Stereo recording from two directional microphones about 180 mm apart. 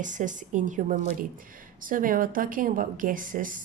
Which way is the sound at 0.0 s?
45° right (ahead or behind).